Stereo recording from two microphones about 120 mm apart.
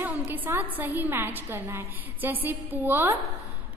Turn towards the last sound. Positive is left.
turn(degrees=-15)  # may be behind; listen again after turning